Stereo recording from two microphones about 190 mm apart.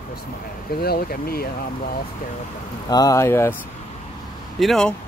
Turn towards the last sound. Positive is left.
turn(degrees=0)  # may be behind; listen again after turning